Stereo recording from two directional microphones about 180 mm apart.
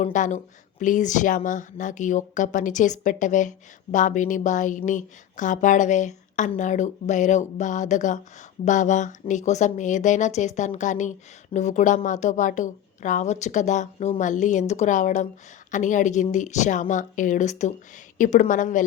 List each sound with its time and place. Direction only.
0.0 s a woman's voice: 40° left (ahead or behind)